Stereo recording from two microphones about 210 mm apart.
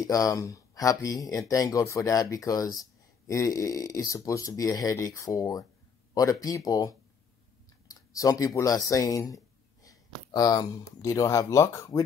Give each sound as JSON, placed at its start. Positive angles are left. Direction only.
{"t": 0.0, "sound": "speech", "side_deg": 15}
{"t": 9.8, "sound": "a sound", "side_deg": 15}
{"t": 11.0, "sound": "speech", "side_deg": 15}